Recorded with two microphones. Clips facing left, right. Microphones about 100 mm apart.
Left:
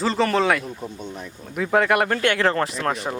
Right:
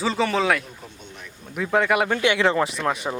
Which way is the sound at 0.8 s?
35° left (ahead or behind).